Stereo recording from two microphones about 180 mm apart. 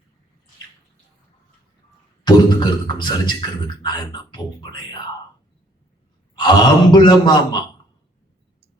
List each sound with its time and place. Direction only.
2.2 s speech: 25° left (ahead or behind)
6.4 s speech: 25° left (ahead or behind)